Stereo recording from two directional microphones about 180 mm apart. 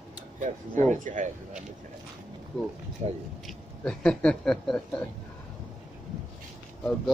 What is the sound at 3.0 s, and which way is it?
Speech, 35° right (ahead or behind).